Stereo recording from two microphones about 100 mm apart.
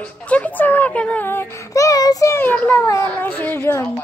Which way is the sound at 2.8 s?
30° left (ahead or behind).